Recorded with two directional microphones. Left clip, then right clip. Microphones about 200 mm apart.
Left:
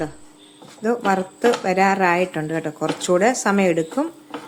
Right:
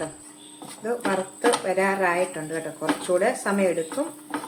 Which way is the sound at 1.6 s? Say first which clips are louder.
Left 5 dB; 50° left (ahead or behind).